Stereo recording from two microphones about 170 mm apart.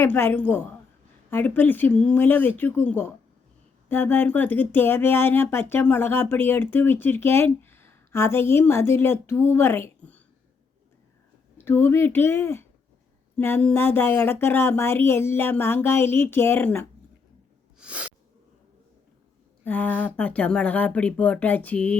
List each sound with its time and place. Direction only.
0.0 s speech: 10° left (ahead or behind)
11.5 s speech: 15° left (ahead or behind)
17.7 s a sound: 5° right (ahead or behind)
19.6 s speech: 10° left (ahead or behind)